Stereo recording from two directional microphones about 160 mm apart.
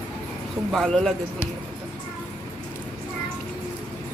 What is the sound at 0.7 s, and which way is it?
Speech, centre (ahead or behind).